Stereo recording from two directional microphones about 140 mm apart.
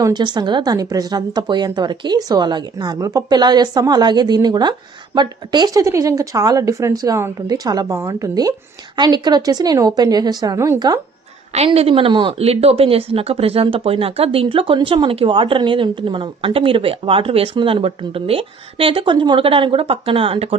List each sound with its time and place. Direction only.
0.0 s speech: 30° right (ahead or behind)
11.5 s speech: 45° right (ahead or behind)